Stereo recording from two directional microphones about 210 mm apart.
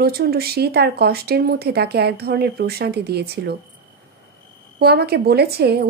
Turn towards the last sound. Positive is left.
turn(degrees=-50)  # may be behind; listen again after turning